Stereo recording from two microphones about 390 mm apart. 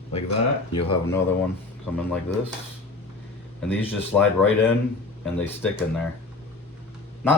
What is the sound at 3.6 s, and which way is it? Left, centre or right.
Speech, centre.